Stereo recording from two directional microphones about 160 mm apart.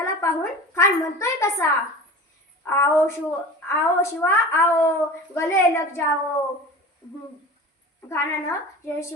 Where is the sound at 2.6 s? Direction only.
15° left (ahead or behind).